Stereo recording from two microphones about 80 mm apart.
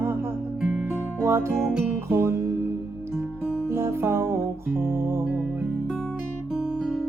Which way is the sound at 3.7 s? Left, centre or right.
Right.